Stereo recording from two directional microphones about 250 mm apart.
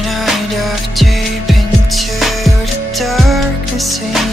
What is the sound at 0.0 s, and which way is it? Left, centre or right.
Music, centre.